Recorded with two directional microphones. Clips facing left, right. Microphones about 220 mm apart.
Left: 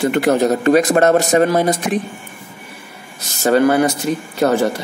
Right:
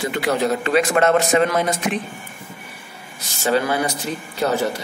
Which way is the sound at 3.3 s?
45° left (ahead or behind).